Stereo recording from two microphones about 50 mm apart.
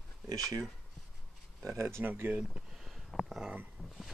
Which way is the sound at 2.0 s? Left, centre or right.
Right.